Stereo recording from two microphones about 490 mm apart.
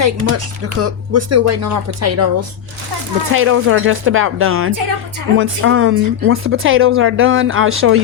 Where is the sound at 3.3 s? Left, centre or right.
Right.